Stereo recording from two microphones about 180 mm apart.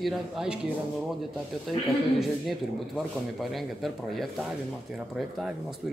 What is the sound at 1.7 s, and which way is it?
Speech, centre (ahead or behind).